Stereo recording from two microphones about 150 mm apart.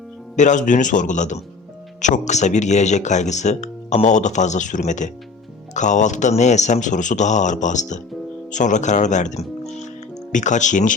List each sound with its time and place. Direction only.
0.3 s a man's voice: 55° left (ahead or behind)